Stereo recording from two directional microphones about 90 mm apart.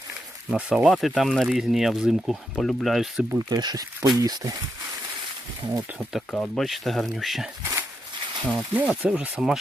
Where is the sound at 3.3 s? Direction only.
50° right (ahead or behind).